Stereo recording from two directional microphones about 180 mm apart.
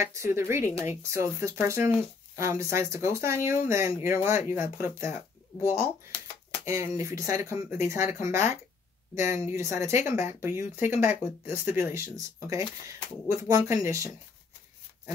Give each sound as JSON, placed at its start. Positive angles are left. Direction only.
{"t": 0.0, "sound": "speech", "side_deg": -15}